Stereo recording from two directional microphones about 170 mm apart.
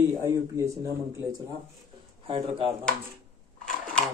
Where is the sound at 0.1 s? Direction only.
15° right (ahead or behind).